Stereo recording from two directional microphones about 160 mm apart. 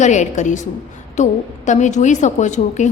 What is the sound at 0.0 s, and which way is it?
A woman's voice, 50° left (ahead or behind).